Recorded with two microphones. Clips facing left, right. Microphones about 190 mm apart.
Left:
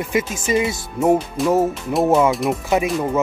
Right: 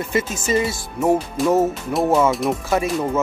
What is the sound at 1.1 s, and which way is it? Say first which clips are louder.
Speech: left 1 dB; centre (ahead or behind).